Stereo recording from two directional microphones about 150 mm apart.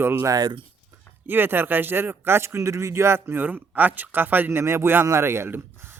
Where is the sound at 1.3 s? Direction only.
15° right (ahead or behind).